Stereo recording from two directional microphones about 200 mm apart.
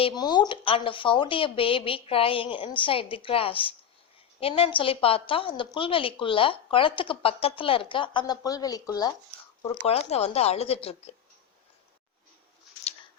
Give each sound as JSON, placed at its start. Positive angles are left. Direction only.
{"t": 0.0, "sound": "a woman's voice", "side_deg": 20}
{"t": 9.6, "sound": "speech", "side_deg": 30}